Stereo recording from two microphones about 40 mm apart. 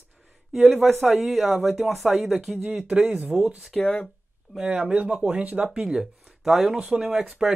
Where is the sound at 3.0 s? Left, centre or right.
Centre.